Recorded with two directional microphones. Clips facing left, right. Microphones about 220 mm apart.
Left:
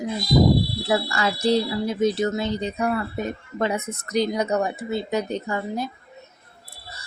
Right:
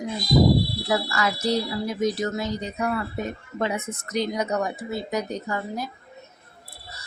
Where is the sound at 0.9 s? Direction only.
30° left (ahead or behind).